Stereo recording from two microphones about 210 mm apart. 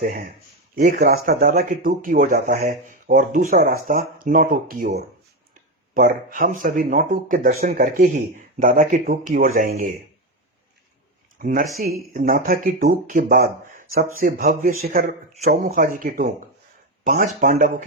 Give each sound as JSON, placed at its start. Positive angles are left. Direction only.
{"t": 0.0, "sound": "speech", "side_deg": -40}
{"t": 11.3, "sound": "speech", "side_deg": -40}